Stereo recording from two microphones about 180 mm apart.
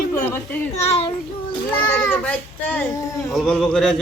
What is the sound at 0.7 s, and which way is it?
Speech, 35° left (ahead or behind).